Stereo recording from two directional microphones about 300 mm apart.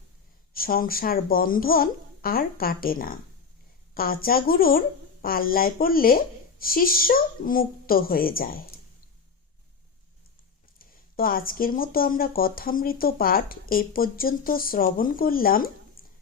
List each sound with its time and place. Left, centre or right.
0.5 s speech: left
10.8 s speech: left
16.0 s a sound: left